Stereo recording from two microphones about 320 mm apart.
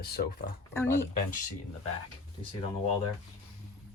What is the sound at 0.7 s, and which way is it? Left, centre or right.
Speech, centre.